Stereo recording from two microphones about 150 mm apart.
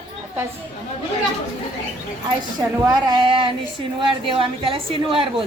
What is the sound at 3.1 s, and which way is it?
A woman's voice, 35° right (ahead or behind).